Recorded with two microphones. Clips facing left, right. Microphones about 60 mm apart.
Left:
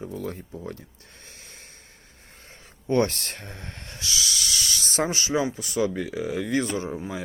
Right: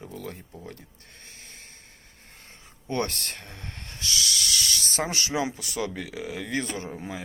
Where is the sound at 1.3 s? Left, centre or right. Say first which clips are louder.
Even; right.